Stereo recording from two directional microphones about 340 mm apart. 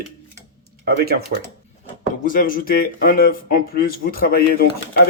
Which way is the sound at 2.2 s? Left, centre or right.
Left.